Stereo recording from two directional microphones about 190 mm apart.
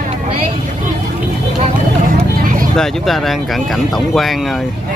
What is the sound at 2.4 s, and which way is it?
Vehicle, 45° right (ahead or behind).